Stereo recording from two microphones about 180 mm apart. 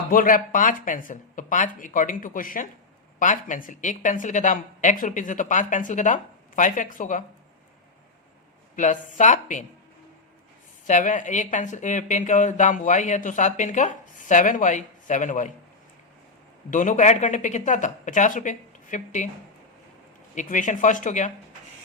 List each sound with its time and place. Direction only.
0.1 s speech: 50° left (ahead or behind)
8.7 s speech: 45° left (ahead or behind)
10.8 s speech: 45° left (ahead or behind)
16.6 s speech: 45° left (ahead or behind)
20.3 s speech: 45° left (ahead or behind)